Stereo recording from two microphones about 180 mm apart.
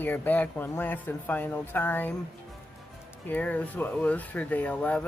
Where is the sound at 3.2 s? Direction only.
10° left (ahead or behind).